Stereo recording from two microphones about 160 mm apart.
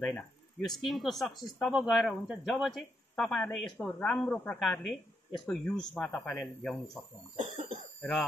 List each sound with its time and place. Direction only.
0.7 s speech: centre (ahead or behind)
6.4 s speech: centre (ahead or behind)
7.3 s cough: 45° right (ahead or behind)
8.0 s speech: 5° left (ahead or behind)